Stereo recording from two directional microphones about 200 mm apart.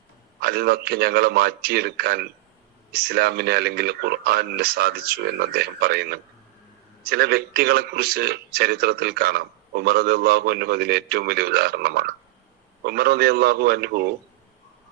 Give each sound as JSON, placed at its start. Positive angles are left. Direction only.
{"t": 0.4, "sound": "a man's voice", "side_deg": -50}